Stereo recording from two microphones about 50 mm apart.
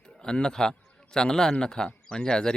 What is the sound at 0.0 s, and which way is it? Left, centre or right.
A man's voice, centre.